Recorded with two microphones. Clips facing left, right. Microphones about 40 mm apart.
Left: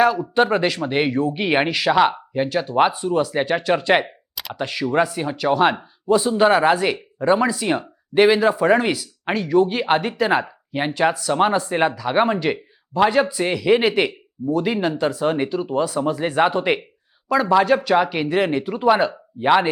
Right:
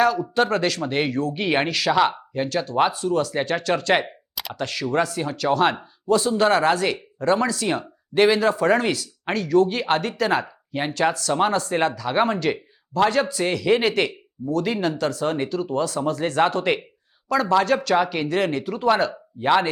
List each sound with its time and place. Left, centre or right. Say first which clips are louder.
0.0 s speech: left 3 dB; centre